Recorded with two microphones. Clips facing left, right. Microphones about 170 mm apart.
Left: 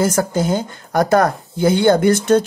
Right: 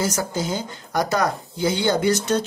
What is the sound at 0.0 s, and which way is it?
Speech, 55° left (ahead or behind).